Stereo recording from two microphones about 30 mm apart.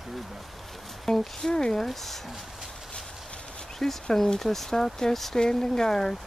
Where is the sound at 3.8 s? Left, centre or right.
Centre.